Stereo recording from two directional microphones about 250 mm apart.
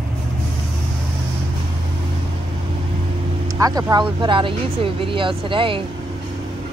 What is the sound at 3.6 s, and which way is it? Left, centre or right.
Speech, centre.